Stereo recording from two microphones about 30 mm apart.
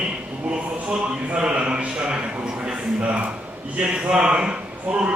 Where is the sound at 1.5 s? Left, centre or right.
Right.